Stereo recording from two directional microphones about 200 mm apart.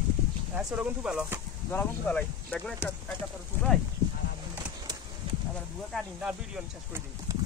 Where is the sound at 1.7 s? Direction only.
10° left (ahead or behind).